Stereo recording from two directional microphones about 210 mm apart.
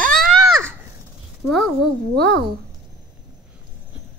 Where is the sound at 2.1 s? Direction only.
50° right (ahead or behind).